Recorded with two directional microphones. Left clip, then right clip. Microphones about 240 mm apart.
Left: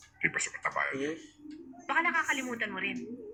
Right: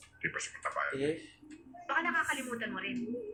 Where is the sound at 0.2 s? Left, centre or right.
Left.